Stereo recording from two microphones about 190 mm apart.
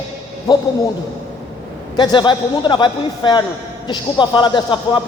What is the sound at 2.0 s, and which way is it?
A man's voice, 25° left (ahead or behind).